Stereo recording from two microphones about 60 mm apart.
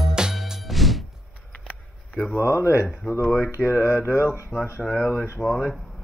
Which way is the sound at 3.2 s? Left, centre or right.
Centre.